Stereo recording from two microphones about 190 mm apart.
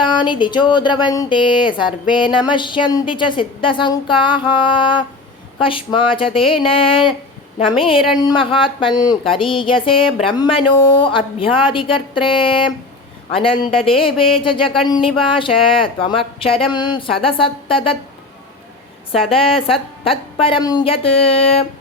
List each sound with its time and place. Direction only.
0.0 s speech: 25° left (ahead or behind)
19.1 s speech: 30° left (ahead or behind)